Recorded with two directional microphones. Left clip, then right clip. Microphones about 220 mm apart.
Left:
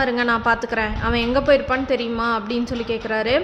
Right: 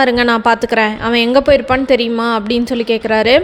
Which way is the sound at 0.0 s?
35° right (ahead or behind).